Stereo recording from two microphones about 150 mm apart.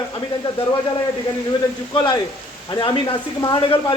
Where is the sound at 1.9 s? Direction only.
30° left (ahead or behind).